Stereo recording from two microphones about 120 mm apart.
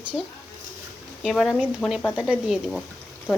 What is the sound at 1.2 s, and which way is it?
Speech, centre (ahead or behind).